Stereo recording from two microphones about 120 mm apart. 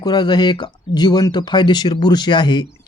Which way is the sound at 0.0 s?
35° left (ahead or behind).